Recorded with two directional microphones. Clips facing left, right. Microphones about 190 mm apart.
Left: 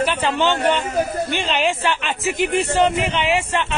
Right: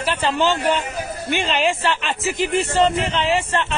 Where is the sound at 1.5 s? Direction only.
Centre (ahead or behind).